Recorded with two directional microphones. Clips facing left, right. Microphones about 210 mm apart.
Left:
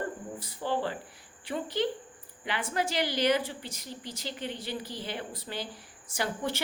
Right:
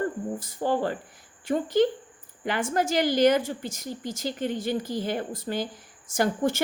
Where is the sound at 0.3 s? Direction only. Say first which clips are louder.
Right 4 dB; 45° right (ahead or behind).